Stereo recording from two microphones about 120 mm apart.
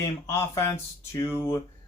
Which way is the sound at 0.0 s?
25° left (ahead or behind).